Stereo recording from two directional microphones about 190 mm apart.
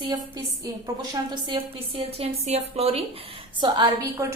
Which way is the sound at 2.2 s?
35° right (ahead or behind).